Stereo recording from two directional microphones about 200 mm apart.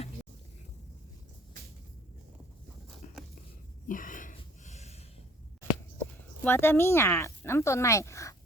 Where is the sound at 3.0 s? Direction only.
40° left (ahead or behind).